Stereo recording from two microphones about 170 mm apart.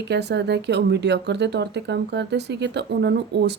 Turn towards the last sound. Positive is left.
turn(degrees=-80)